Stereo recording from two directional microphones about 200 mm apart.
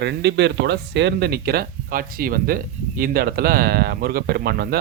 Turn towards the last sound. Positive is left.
turn(degrees=-50)  # may be behind; listen again after turning